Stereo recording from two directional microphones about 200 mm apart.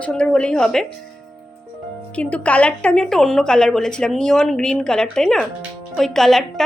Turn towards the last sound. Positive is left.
turn(degrees=0)  # may be behind; listen again after turning